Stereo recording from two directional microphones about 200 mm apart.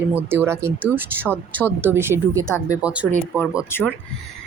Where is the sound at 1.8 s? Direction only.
10° right (ahead or behind).